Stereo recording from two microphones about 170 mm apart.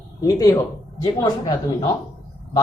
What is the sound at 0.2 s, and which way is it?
Speech, 20° left (ahead or behind).